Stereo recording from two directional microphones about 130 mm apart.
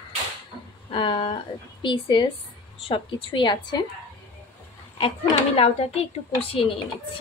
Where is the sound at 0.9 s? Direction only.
40° left (ahead or behind).